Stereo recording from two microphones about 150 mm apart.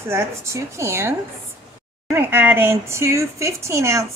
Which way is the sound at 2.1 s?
15° right (ahead or behind).